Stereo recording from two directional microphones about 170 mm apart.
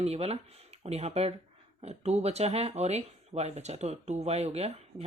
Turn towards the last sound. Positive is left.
turn(degrees=-40)  # may be behind; listen again after turning